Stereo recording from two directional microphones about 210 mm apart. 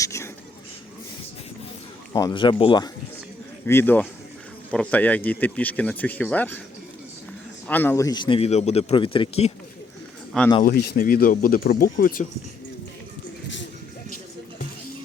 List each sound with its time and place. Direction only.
0.0 s a sound: 15° left (ahead or behind)
2.1 s a man's voice: 20° left (ahead or behind)
3.7 s speech: 10° left (ahead or behind)
7.7 s a man's voice: 10° left (ahead or behind); by 9.5 s 25° left (ahead or behind)
10.6 s speech: 45° left (ahead or behind)